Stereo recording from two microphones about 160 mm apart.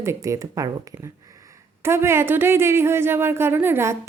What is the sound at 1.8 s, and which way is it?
Speech, 15° right (ahead or behind).